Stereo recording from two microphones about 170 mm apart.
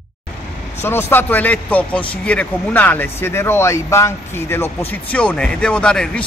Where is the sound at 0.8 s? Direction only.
15° left (ahead or behind).